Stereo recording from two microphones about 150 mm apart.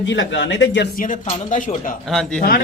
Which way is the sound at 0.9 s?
60° left (ahead or behind).